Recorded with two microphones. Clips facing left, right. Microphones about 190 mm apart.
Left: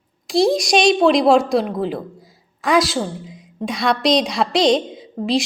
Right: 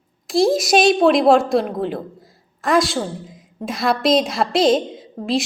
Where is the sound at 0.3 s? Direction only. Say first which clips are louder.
Even; centre (ahead or behind).